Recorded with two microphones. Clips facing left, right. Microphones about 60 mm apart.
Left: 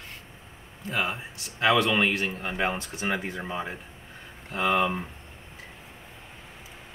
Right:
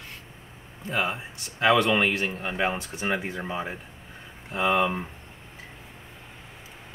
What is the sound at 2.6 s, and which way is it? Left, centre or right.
Speech, centre.